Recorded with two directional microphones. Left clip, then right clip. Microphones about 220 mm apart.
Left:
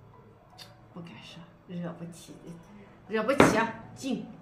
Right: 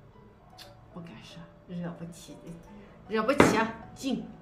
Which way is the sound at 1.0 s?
20° right (ahead or behind).